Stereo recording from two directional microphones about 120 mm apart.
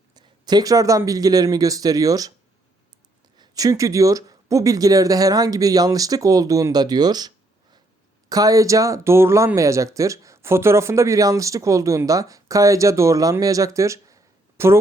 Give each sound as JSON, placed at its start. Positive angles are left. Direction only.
{"t": 0.1, "sound": "speech", "side_deg": -35}
{"t": 3.3, "sound": "speech", "side_deg": -35}